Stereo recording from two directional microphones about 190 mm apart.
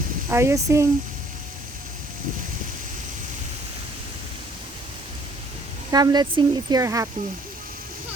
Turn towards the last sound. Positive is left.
turn(degrees=-15)  # may be behind; listen again after turning